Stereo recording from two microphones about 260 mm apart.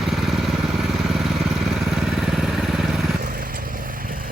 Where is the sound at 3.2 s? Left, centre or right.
Right.